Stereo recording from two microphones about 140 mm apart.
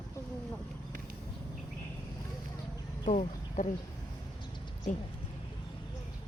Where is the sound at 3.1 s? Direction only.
55° left (ahead or behind).